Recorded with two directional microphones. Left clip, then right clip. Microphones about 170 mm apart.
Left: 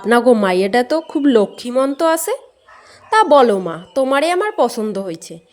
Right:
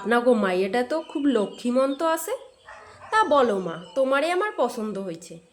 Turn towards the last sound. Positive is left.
turn(degrees=40)  # may be behind; listen again after turning